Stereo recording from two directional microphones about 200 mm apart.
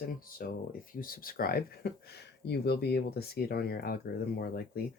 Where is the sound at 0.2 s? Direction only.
45° left (ahead or behind).